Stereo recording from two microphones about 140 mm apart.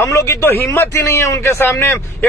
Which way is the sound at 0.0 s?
20° left (ahead or behind).